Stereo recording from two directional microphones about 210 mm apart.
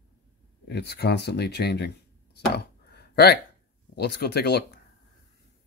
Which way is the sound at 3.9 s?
50° left (ahead or behind).